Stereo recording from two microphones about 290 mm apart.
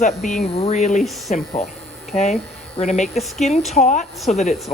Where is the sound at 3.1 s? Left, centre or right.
Centre.